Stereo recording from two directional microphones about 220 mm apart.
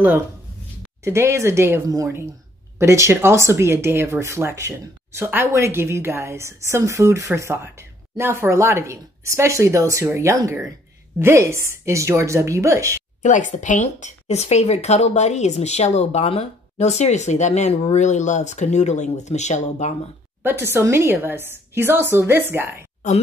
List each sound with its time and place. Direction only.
1.0 s speech: 10° right (ahead or behind)
13.2 s speech: 35° left (ahead or behind)
20.4 s speech: 10° right (ahead or behind)